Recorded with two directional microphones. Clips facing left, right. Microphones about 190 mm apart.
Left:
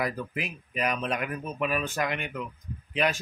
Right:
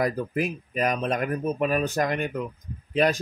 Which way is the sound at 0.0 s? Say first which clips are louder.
Right 6 dB; 45° right (ahead or behind).